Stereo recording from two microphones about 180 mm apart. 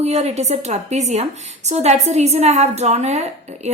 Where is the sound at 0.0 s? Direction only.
35° right (ahead or behind).